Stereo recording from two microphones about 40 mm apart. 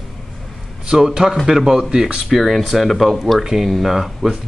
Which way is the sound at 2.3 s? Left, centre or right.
Centre.